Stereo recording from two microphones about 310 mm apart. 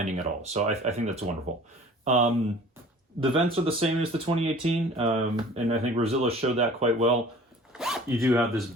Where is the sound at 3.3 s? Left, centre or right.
Centre.